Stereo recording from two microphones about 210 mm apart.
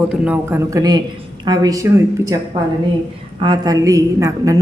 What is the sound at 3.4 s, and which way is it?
A woman's voice, 20° right (ahead or behind).